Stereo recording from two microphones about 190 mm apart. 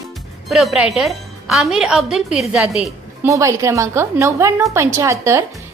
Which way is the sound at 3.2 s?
15° right (ahead or behind).